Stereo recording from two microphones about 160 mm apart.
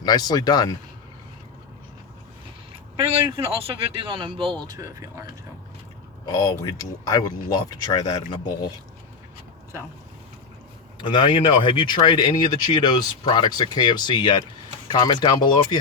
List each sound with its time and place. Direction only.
0.0 s speech: 25° left (ahead or behind)
2.9 s speech: 30° right (ahead or behind)
4.6 s speech: 20° right (ahead or behind)
6.4 s speech: 20° left (ahead or behind)
11.0 s speech: 30° left (ahead or behind)